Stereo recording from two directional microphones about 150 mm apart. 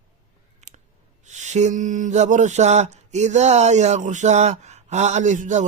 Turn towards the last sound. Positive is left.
turn(degrees=-55)  # may be behind; listen again after turning